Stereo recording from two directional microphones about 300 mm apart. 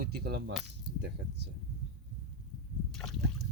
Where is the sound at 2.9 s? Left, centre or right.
Centre.